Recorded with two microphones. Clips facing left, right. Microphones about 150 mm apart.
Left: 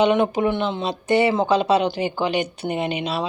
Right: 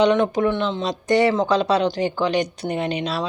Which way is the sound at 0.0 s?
10° left (ahead or behind).